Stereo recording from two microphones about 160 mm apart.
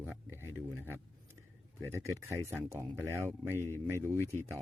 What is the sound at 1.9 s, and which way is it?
Speech, 15° right (ahead or behind).